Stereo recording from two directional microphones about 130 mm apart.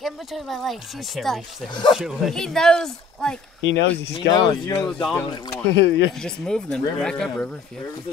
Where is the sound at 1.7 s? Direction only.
35° left (ahead or behind).